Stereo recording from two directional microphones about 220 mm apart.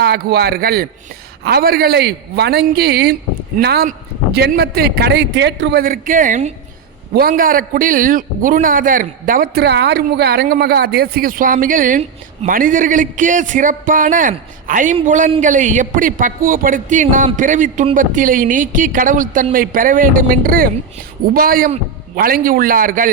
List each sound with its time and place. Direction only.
0.0 s a man's voice: 45° right (ahead or behind)